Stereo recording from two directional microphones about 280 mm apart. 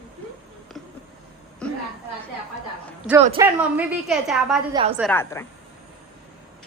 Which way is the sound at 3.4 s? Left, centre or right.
Centre.